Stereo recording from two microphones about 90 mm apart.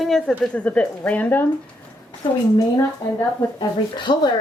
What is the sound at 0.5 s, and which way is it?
Speech, 15° left (ahead or behind).